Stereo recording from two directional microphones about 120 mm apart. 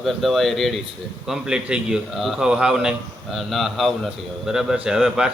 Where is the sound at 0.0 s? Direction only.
Centre (ahead or behind).